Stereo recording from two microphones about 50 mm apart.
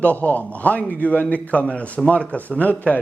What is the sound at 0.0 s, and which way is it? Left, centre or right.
A man's voice, left.